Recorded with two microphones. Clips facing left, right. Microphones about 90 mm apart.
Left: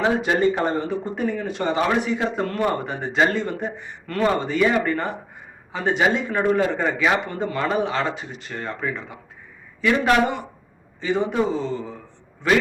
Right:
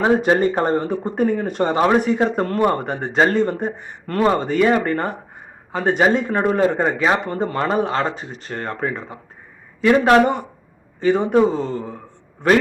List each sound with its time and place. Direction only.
0.0 s speech: 40° right (ahead or behind)
3.2 s speech: 45° right (ahead or behind)